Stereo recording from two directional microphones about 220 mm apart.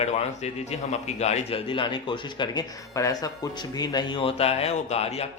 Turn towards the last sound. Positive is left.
turn(degrees=30)  # may be behind; listen again after turning